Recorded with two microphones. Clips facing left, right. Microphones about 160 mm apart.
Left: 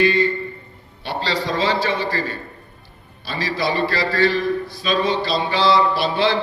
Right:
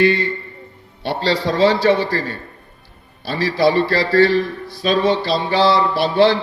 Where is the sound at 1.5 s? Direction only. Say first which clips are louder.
Right 8 dB; 55° right (ahead or behind).